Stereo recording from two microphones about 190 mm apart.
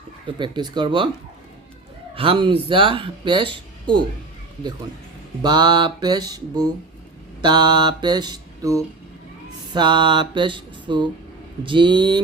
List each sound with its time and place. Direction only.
0.3 s speech: 25° right (ahead or behind)
2.1 s speech: 30° right (ahead or behind)
5.4 s speech: 25° right (ahead or behind)